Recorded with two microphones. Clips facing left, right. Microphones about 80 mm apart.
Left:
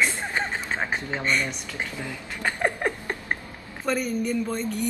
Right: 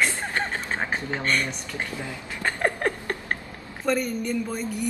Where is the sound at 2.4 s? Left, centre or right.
Centre.